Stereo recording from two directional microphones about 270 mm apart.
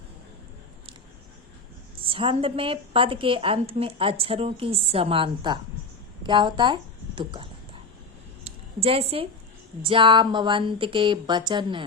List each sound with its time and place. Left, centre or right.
2.0 s a woman's voice: centre
8.4 s a sound: right
9.8 s speech: centre